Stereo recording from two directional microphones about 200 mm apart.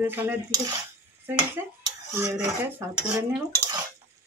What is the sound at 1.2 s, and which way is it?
Dishes, 15° right (ahead or behind).